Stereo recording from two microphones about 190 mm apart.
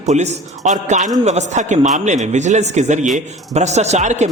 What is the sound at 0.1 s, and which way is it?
A man's voice, 40° right (ahead or behind).